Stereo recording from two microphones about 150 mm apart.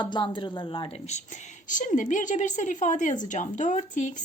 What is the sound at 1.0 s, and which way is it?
A woman's voice, 50° left (ahead or behind).